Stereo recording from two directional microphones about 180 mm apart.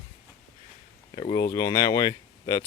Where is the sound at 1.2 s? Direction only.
25° left (ahead or behind).